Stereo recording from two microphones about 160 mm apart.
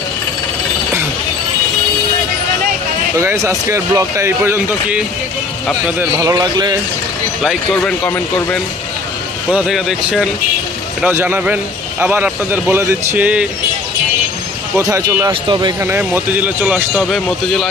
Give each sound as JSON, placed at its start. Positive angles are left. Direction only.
{"t": 3.2, "sound": "a man's voice", "side_deg": -20}
{"t": 7.4, "sound": "speech", "side_deg": 0}
{"t": 9.5, "sound": "a man's voice", "side_deg": -5}
{"t": 14.8, "sound": "a man's voice", "side_deg": -20}
{"t": 15.8, "sound": "a man's voice", "side_deg": -15}